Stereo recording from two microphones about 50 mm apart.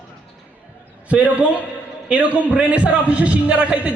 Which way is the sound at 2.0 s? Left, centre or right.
Right.